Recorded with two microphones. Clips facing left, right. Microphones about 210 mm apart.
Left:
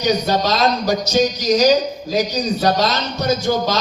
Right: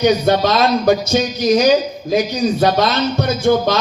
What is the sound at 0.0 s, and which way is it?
A man's voice, 55° right (ahead or behind).